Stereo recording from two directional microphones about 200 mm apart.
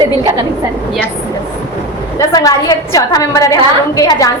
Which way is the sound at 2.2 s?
20° left (ahead or behind).